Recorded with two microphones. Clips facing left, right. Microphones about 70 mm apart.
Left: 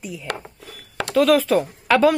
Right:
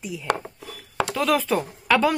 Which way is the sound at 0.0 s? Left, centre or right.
Centre.